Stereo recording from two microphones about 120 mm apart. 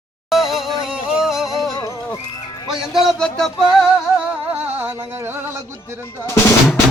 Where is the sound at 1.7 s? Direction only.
25° left (ahead or behind).